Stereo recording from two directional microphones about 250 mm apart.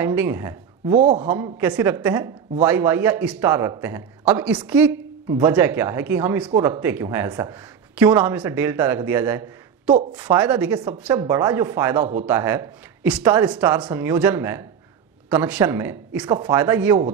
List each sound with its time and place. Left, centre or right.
0.0 s speech: centre
0.9 s a man's voice: right
1.2 s a man's voice: centre